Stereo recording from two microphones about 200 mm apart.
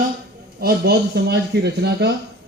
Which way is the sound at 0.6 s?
50° right (ahead or behind).